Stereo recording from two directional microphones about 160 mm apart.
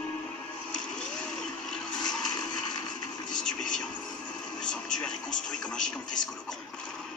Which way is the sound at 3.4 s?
5° left (ahead or behind).